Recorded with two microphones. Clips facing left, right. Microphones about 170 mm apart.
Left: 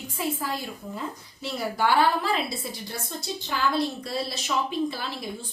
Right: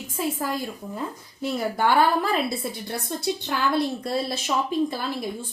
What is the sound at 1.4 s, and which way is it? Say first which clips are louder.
A woman's voice: right 3 dB; 50° right (ahead or behind).